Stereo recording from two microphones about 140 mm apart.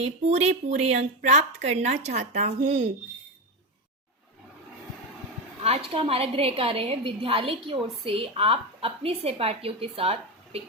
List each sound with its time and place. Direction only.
0.0 s a woman's voice: 55° right (ahead or behind)
5.6 s a woman's voice: 45° right (ahead or behind)